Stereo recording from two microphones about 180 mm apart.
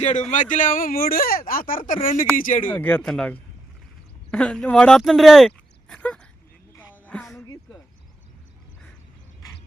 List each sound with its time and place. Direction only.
0.0 s speech: 45° left (ahead or behind)
2.6 s speech: 10° left (ahead or behind)
6.7 s music: 10° left (ahead or behind)